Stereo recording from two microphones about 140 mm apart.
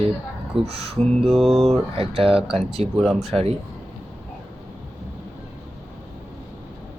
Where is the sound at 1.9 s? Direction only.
45° right (ahead or behind).